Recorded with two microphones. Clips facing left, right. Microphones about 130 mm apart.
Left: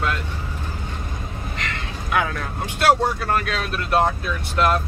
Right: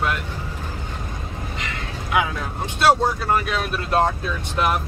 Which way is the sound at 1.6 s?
10° right (ahead or behind).